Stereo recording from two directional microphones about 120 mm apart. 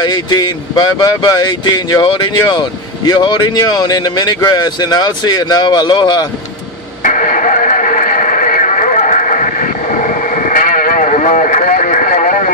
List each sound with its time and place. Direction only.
0.0 s speech: 35° left (ahead or behind)
7.0 s radio: 90° left